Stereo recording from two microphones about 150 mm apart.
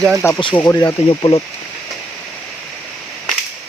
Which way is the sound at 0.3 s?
35° left (ahead or behind).